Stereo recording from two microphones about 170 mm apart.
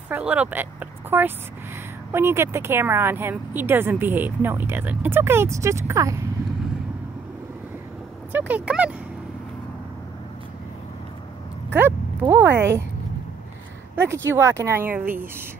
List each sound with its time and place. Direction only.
0.1 s speech: 10° right (ahead or behind)
8.3 s speech: 10° right (ahead or behind)
11.7 s speech: 10° right (ahead or behind)
13.9 s speech: 15° right (ahead or behind)